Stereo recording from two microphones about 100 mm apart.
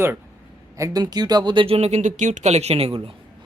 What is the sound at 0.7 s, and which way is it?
Speech, 35° right (ahead or behind).